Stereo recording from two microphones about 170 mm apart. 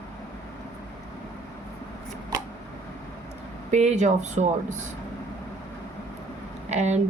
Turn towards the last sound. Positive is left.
turn(degrees=-40)  # may be behind; listen again after turning